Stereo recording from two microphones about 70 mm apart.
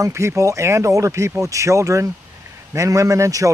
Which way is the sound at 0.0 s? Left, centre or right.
Right.